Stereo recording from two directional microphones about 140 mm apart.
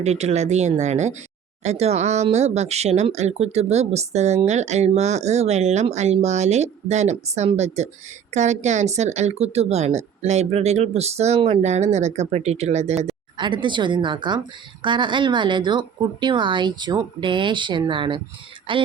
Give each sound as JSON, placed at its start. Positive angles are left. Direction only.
{"t": 0.0, "sound": "speech", "side_deg": -50}
{"t": 13.3, "sound": "a woman's voice", "side_deg": -35}